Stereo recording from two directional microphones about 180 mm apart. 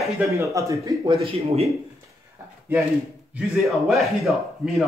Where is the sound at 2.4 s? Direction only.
20° right (ahead or behind).